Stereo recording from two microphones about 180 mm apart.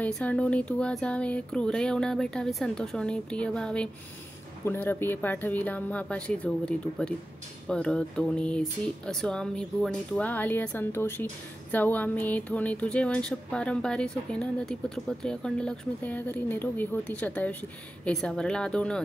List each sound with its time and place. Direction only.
0.0 s speech: 5° left (ahead or behind)